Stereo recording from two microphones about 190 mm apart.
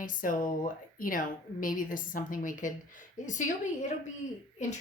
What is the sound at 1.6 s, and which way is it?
Speech, 45° left (ahead or behind).